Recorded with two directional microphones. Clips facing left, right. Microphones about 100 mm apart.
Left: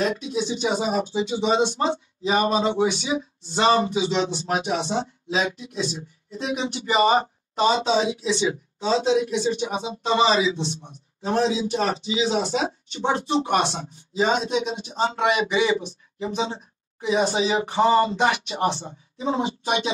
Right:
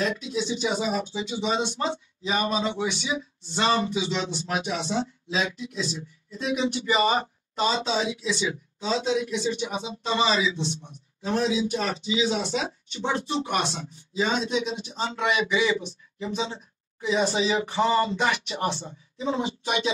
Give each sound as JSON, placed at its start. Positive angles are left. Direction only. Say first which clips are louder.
{"t": 0.0, "sound": "speech", "louder": "left 3 dB", "side_deg": 30}
{"t": 0.5, "sound": "speech", "louder": "left 2 dB", "side_deg": 45}
{"t": 4.9, "sound": "speech", "louder": "left 2 dB", "side_deg": 25}
{"t": 15.4, "sound": "speech", "louder": "left 3 dB", "side_deg": 35}